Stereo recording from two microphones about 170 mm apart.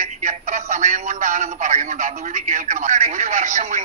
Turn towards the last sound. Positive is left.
turn(degrees=-45)  # may be behind; listen again after turning